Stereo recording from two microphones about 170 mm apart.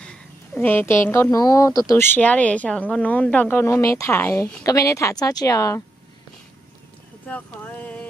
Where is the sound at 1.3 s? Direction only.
20° left (ahead or behind).